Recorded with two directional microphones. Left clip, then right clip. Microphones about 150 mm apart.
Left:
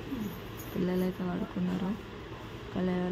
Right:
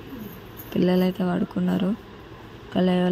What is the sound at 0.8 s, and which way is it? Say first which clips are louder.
Speech: right 10 dB; 50° right (ahead or behind).